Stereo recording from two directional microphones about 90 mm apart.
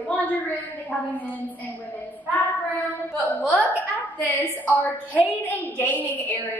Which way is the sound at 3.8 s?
20° left (ahead or behind).